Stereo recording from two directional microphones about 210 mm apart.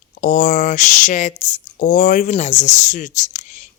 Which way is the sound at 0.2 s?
40° left (ahead or behind).